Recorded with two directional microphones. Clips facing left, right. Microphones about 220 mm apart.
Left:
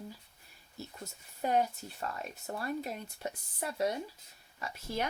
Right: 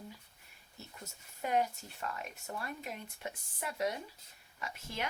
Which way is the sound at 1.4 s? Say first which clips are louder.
Left 3 dB; 35° left (ahead or behind).